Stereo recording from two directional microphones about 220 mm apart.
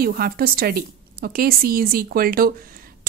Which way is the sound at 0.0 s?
40° right (ahead or behind).